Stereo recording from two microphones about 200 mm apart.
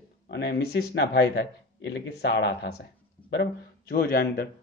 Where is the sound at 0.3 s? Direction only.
55° left (ahead or behind).